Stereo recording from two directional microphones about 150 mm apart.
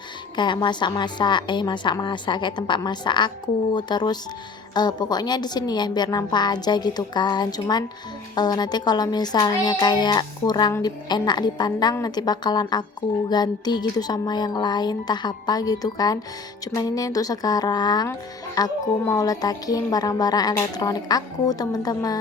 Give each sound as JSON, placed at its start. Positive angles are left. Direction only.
{"t": 0.3, "sound": "a woman's voice", "side_deg": 30}